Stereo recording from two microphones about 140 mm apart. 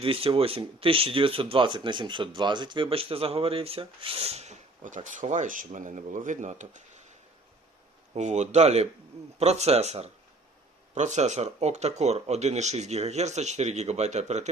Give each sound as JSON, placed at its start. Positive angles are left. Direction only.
{"t": 0.0, "sound": "speech", "side_deg": -40}
{"t": 8.1, "sound": "speech", "side_deg": -55}